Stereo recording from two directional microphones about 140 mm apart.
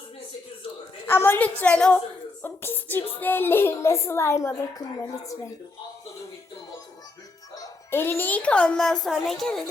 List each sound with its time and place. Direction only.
1.0 s a woman's voice: 15° left (ahead or behind)
7.5 s a child's voice: 20° left (ahead or behind); by 9.6 s centre (ahead or behind)